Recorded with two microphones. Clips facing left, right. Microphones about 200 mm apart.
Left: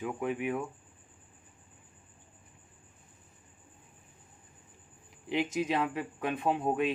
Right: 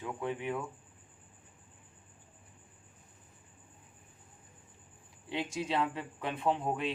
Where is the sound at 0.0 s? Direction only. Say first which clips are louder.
Left 4 dB; 15° left (ahead or behind).